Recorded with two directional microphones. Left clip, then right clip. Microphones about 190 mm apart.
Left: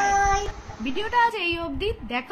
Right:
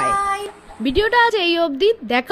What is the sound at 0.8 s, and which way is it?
A woman's voice, 50° right (ahead or behind).